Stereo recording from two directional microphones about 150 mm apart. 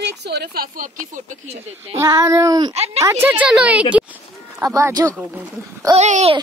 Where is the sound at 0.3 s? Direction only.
90° right; by 1.6 s 65° right (ahead or behind).